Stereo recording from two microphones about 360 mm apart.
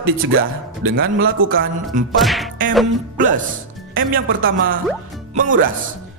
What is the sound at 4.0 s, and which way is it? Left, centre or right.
Speech, right.